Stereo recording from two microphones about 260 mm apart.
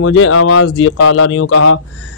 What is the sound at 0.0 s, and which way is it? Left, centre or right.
Speech, left.